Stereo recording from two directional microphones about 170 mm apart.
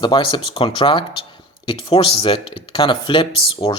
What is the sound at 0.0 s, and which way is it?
Speech, 30° left (ahead or behind).